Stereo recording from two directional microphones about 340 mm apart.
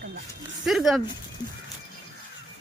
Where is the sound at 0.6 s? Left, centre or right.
Centre.